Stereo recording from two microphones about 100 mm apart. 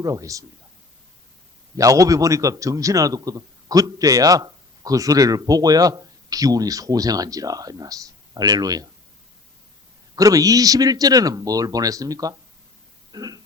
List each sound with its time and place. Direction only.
0.0 s a man's voice: 35° right (ahead or behind)
1.7 s a man's voice: 35° right (ahead or behind)
10.2 s a man's voice: 35° right (ahead or behind)
13.1 s a sound: 40° right (ahead or behind)